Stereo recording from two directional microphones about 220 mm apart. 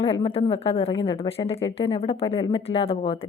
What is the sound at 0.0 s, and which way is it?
A woman's voice, 25° left (ahead or behind).